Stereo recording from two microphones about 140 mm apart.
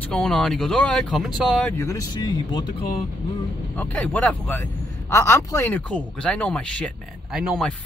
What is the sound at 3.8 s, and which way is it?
Speech, 10° left (ahead or behind).